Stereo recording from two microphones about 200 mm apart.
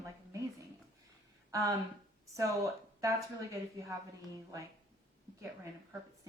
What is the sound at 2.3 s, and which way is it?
Speech, 15° right (ahead or behind).